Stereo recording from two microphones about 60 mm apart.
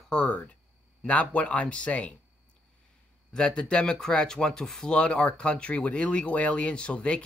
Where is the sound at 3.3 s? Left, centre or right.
Centre.